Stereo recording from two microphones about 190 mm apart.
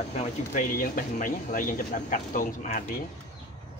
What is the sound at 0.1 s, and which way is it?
Speech, 40° left (ahead or behind).